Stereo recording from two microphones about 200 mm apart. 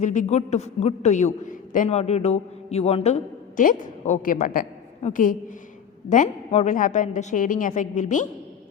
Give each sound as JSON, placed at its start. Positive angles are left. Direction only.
{"t": 0.0, "sound": "a man's voice", "side_deg": 40}